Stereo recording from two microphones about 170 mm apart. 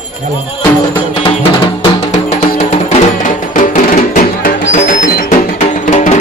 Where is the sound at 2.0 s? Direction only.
40° left (ahead or behind).